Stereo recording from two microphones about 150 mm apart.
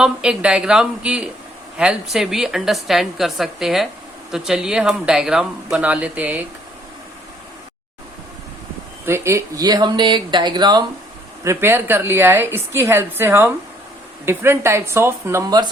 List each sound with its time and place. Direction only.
0.0 s a woman's voice: 5° right (ahead or behind)
9.0 s speech: 15° right (ahead or behind)
11.4 s a woman's voice: 15° right (ahead or behind)